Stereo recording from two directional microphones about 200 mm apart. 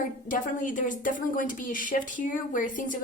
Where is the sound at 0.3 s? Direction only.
40° left (ahead or behind).